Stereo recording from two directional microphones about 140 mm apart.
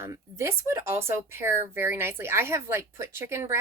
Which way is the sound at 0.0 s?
20° right (ahead or behind).